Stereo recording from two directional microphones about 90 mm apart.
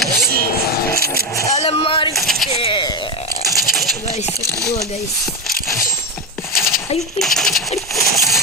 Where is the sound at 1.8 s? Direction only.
85° left.